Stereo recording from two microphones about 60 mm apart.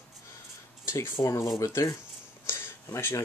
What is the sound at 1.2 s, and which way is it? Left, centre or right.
Speech, left.